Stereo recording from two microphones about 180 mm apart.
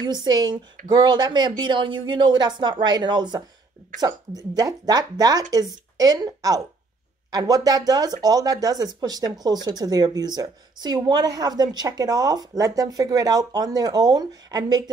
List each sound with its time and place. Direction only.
0.0 s speech: 25° right (ahead or behind)